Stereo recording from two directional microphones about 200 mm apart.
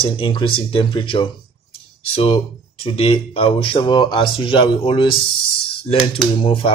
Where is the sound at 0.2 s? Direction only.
25° left (ahead or behind).